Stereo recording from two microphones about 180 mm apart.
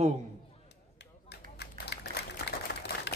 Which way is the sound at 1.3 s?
70° left (ahead or behind).